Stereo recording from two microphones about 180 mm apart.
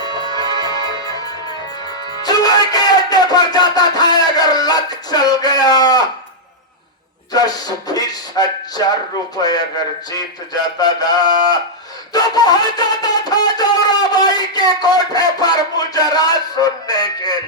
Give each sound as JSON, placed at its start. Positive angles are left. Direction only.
{"t": 0.0, "sound": "music", "side_deg": 20}
{"t": 2.2, "sound": "music", "side_deg": 20}
{"t": 7.3, "sound": "speech", "side_deg": 20}
{"t": 12.1, "sound": "a sound", "side_deg": 20}